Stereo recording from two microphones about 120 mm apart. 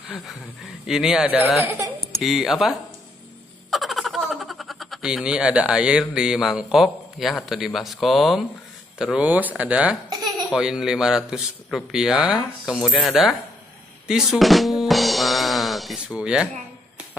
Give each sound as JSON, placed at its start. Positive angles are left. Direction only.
{"t": 0.8, "sound": "a man's voice", "side_deg": -5}
{"t": 3.7, "sound": "a sound", "side_deg": 0}
{"t": 7.4, "sound": "a man's voice", "side_deg": 0}
{"t": 10.0, "sound": "baby laughter", "side_deg": -35}
{"t": 10.5, "sound": "a man's voice", "side_deg": -5}
{"t": 14.0, "sound": "drum", "side_deg": -5}